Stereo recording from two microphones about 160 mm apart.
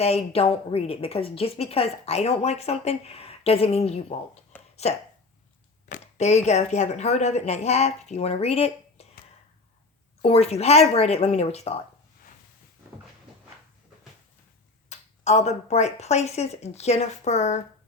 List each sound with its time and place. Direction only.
0.0 s a woman's voice: 40° left (ahead or behind)
4.5 s a sound: 10° left (ahead or behind)
5.9 s speech: 45° left (ahead or behind)
10.2 s a woman's voice: 40° left (ahead or behind)
14.8 s speech: 45° left (ahead or behind)